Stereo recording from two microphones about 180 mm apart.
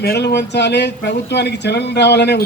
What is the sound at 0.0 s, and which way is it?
A man's voice, 60° left (ahead or behind).